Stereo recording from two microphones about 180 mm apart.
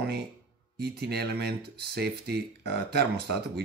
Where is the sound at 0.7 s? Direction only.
65° right (ahead or behind).